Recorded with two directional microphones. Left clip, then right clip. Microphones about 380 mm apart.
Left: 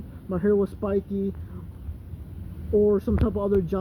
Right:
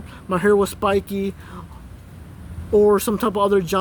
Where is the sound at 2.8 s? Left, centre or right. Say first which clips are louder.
Right 6 dB; centre.